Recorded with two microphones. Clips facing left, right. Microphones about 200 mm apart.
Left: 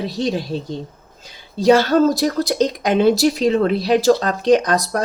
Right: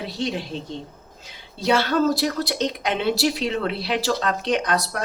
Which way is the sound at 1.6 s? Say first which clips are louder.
Left 7 dB; 45° left (ahead or behind).